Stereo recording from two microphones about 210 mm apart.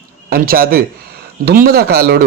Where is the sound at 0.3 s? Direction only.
45° right (ahead or behind).